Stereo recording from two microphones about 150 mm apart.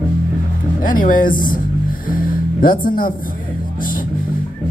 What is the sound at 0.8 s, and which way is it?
Speech, 65° left (ahead or behind).